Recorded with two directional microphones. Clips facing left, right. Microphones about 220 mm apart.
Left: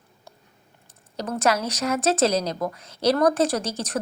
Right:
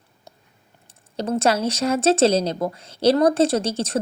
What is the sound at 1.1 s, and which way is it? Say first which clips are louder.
Speech: right 3 dB; 25° right (ahead or behind).